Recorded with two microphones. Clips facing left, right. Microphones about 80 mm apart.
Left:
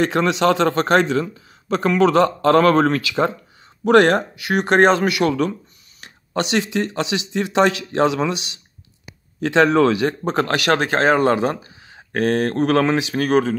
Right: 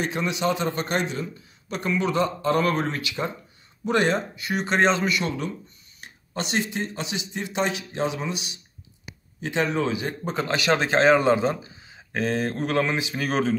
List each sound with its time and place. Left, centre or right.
0.0 s a man's voice: left
3.8 s speech: left
5.9 s a man's voice: left
13.2 s speech: left